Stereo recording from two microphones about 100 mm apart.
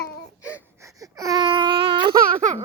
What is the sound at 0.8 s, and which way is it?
Baby cry, 35° right (ahead or behind).